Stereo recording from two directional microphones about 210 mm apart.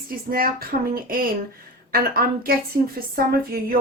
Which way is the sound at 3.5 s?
45° right (ahead or behind).